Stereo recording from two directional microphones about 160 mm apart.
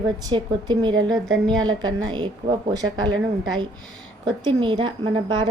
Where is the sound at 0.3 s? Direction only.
25° right (ahead or behind).